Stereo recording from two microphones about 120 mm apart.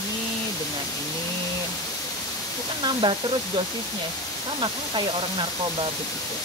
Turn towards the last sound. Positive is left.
turn(degrees=-45)  # may be behind; listen again after turning